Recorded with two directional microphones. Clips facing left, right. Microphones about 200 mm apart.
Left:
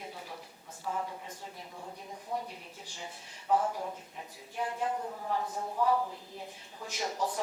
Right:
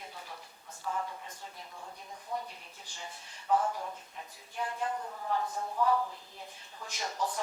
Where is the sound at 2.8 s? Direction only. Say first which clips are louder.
Left 1 dB; 5° left (ahead or behind).